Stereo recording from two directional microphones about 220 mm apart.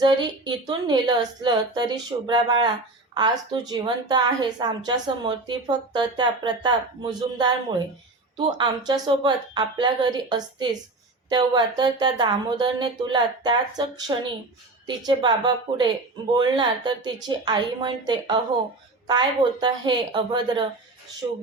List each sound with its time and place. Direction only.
0.0 s a woman's voice: 20° right (ahead or behind)
8.5 s a woman's voice: 20° right (ahead or behind)